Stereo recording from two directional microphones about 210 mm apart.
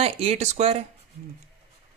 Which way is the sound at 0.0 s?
25° right (ahead or behind).